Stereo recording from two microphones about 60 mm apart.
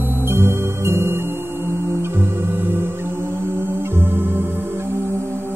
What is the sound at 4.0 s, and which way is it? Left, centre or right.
Music, right.